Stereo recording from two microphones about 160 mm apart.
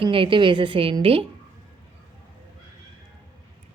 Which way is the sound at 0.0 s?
30° right (ahead or behind).